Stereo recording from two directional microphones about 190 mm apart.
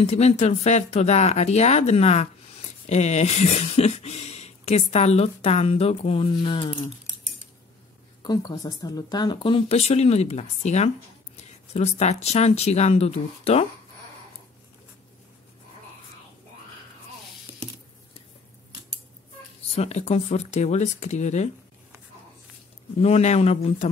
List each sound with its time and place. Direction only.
0.0 s speech: 35° left (ahead or behind)
8.2 s speech: 20° left (ahead or behind)
19.7 s speech: 35° left (ahead or behind)
22.9 s speech: 35° left (ahead or behind)